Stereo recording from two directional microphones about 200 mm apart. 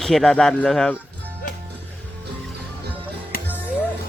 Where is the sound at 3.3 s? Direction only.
50° left (ahead or behind).